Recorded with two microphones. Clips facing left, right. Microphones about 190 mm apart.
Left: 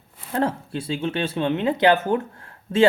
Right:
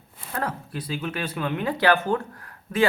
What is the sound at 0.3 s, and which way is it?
Speech, 25° left (ahead or behind).